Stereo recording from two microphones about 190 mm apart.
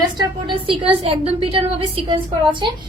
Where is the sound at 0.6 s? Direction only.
30° right (ahead or behind).